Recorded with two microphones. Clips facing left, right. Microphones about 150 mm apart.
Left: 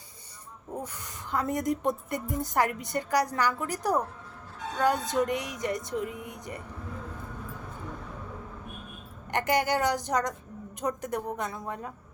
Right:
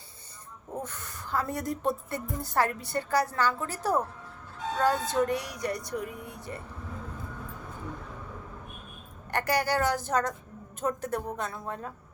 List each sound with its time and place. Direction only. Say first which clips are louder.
0.8 s a woman's voice: right 2 dB; 10° left (ahead or behind)
9.3 s a woman's voice: left 1 dB; 20° left (ahead or behind)